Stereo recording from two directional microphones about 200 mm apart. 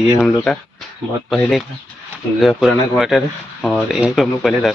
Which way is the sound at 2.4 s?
Centre (ahead or behind).